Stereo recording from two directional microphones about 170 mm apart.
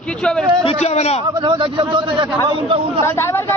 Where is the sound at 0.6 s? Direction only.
40° left (ahead or behind).